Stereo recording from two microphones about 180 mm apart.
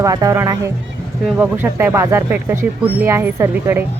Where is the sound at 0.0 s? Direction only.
20° right (ahead or behind).